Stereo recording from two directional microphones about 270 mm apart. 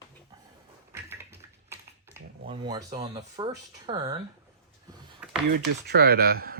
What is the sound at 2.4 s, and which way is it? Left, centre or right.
Speech, centre.